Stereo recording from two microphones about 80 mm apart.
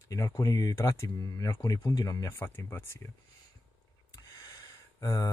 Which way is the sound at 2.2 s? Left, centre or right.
Left.